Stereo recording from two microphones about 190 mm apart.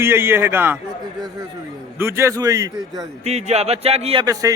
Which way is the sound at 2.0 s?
15° right (ahead or behind).